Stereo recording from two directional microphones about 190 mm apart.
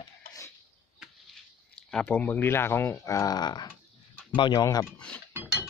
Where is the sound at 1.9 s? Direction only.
5° left (ahead or behind).